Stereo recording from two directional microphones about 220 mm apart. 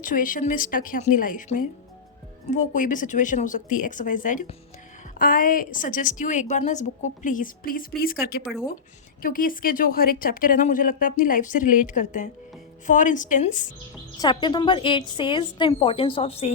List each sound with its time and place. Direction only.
0.0 s a woman's voice: 35° left (ahead or behind)
14.2 s a woman's voice: 20° left (ahead or behind)